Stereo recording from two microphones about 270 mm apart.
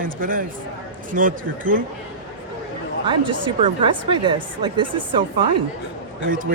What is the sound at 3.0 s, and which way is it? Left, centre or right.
A woman's voice, centre.